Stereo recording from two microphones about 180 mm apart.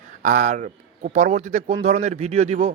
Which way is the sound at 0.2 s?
45° right (ahead or behind).